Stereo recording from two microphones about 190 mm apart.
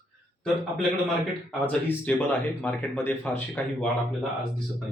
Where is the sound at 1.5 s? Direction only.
10° left (ahead or behind).